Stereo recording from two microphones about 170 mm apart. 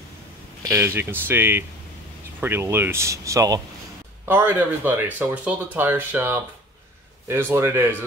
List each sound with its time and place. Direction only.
0.6 s speech: 15° right (ahead or behind)
4.3 s speech: 10° right (ahead or behind)